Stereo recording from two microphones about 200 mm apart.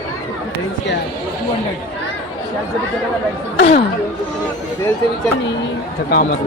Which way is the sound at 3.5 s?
55° left (ahead or behind).